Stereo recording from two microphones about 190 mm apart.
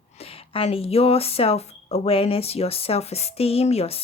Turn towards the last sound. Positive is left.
turn(degrees=30)  # may be behind; listen again after turning